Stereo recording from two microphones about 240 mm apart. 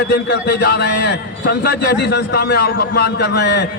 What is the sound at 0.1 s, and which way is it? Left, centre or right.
A man's voice, left.